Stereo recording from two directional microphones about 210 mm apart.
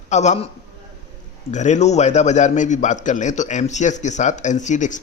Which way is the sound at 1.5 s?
35° left (ahead or behind).